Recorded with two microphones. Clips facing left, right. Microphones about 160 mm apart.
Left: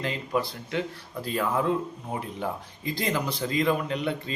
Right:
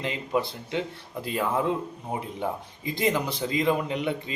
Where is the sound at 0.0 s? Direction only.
20° right (ahead or behind).